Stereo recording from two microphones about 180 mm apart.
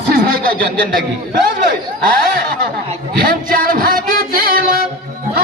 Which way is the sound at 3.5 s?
50° right (ahead or behind).